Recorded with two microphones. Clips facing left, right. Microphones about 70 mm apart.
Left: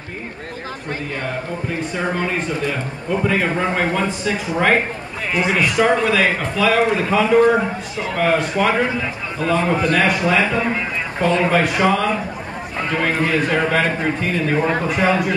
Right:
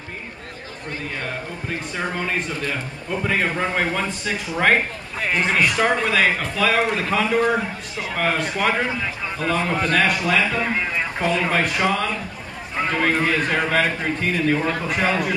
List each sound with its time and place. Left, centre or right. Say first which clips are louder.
2.6 s a man's voice: left 4 dB; centre
10.2 s a man's voice: left 3 dB; centre
10.7 s a man's voice: left 1 dB; centre